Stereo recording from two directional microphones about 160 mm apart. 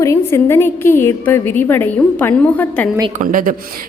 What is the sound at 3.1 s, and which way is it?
Speech, 60° right (ahead or behind).